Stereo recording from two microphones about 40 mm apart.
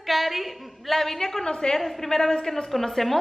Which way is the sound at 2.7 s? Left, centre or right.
Centre.